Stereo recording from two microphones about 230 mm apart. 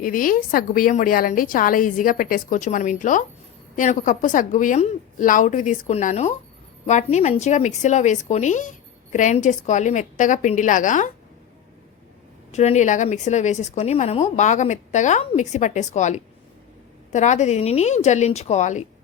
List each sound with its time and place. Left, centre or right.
0.0 s a woman's voice: left
12.5 s a woman's voice: left